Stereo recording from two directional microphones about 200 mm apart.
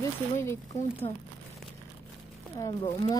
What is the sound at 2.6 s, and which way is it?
Speech, 20° left (ahead or behind).